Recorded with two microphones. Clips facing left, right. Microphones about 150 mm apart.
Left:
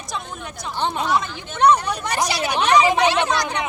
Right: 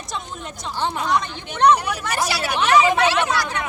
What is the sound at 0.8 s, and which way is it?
Speech, 20° left (ahead or behind).